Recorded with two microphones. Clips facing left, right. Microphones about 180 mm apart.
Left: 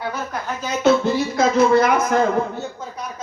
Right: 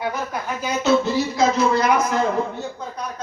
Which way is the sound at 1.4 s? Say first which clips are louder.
Left 4 dB; 55° left (ahead or behind).